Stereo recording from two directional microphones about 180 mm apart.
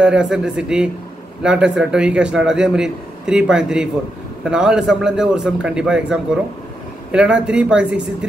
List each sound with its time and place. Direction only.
0.0 s a man's voice: 5° right (ahead or behind)